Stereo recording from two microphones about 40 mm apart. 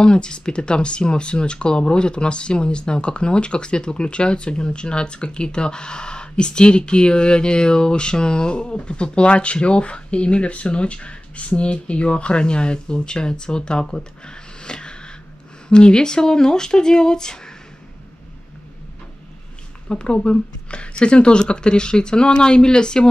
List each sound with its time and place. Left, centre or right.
0.0 s speech: left
19.9 s speech: left